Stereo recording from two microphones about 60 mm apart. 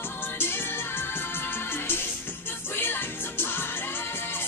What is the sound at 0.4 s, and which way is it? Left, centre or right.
Music, left.